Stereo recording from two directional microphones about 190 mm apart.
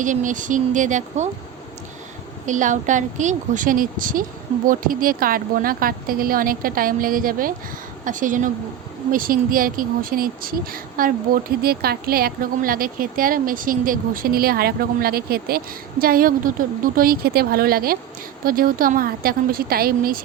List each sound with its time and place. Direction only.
0.0 s speech: 40° right (ahead or behind)
2.5 s speech: 40° right (ahead or behind)